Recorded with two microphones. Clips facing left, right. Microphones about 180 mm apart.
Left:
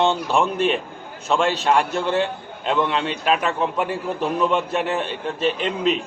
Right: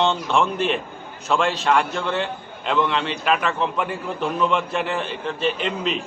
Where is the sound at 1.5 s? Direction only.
30° left (ahead or behind).